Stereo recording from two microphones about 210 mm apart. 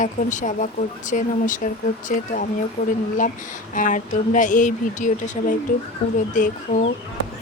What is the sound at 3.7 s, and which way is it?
Speech, 40° left (ahead or behind).